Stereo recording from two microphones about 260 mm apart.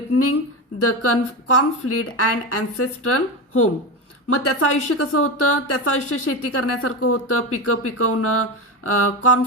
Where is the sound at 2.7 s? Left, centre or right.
Left.